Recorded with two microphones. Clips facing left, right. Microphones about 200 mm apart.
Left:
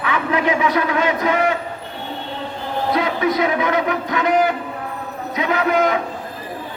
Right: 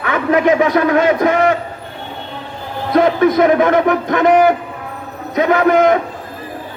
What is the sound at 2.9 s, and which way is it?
A man's voice, 50° right (ahead or behind).